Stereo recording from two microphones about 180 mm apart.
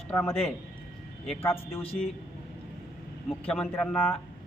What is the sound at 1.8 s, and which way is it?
Speech, 35° left (ahead or behind).